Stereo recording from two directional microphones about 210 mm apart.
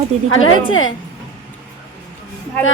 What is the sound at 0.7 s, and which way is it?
Speech, 70° left (ahead or behind).